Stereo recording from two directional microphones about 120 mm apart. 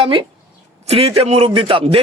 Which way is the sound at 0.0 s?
45° right (ahead or behind).